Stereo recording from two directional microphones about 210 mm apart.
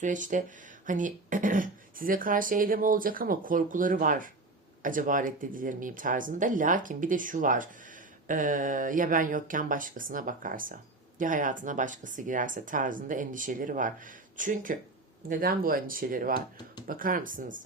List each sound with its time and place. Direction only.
0.0 s speech: 35° right (ahead or behind)